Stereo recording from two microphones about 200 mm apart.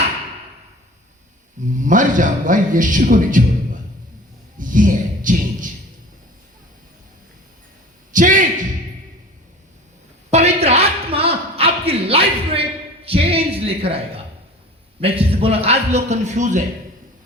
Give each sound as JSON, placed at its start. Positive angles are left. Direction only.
{"t": 1.8, "sound": "a man's voice", "side_deg": -40}
{"t": 4.5, "sound": "a man's voice", "side_deg": -40}
{"t": 8.1, "sound": "a man's voice", "side_deg": -40}
{"t": 10.3, "sound": "a sound", "side_deg": -30}
{"t": 13.1, "sound": "music", "side_deg": -30}
{"t": 15.0, "sound": "a man's voice", "side_deg": -30}